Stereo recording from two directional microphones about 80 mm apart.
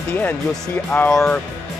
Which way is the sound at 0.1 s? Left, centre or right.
Left.